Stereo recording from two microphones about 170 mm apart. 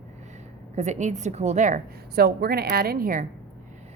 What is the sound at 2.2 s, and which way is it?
A woman's voice, 65° right (ahead or behind).